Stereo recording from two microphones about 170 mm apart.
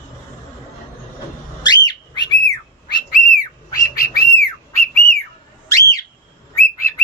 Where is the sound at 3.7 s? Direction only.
65° left (ahead or behind).